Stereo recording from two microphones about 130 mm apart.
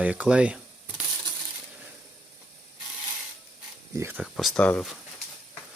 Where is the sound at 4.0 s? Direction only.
15° right (ahead or behind).